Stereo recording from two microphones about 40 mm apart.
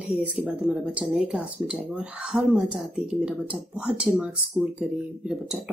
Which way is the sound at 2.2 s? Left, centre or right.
Centre.